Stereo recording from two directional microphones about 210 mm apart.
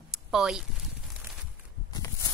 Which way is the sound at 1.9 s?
15° left (ahead or behind).